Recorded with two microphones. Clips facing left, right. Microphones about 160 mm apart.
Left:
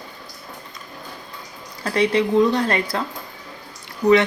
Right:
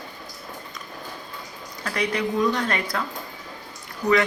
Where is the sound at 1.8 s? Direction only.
30° left (ahead or behind).